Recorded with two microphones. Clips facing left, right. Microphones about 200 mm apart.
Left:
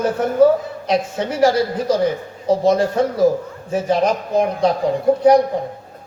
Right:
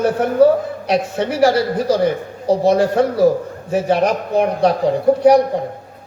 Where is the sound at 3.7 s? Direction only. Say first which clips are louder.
Right 1 dB; 65° right (ahead or behind).